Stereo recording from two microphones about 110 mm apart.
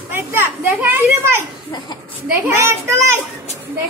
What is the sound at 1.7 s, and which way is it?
Speech, 40° left (ahead or behind).